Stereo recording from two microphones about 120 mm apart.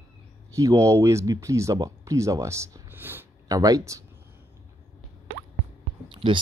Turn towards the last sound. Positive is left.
turn(degrees=-45)  # may be behind; listen again after turning